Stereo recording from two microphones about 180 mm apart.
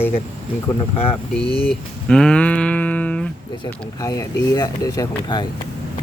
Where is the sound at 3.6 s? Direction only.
20° left (ahead or behind).